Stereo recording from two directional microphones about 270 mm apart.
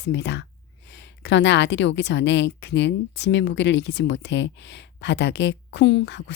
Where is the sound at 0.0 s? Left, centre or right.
Left.